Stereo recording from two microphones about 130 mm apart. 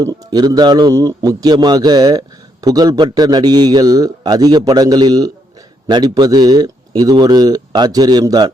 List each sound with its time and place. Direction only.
0.0 s a man's voice: 30° right (ahead or behind)